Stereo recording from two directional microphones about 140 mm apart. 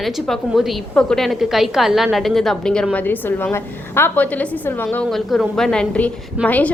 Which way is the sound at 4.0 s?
15° left (ahead or behind).